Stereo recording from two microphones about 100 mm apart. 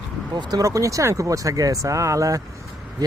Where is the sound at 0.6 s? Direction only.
35° right (ahead or behind).